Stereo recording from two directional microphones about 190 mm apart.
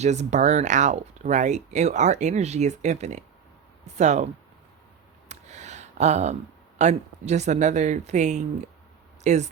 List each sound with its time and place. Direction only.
0.0 s speech: 35° right (ahead or behind)
5.3 s a sound: 35° right (ahead or behind)
6.7 s speech: 35° right (ahead or behind)